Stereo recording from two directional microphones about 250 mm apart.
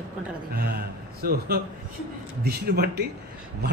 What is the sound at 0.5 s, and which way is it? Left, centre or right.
A man's voice, right.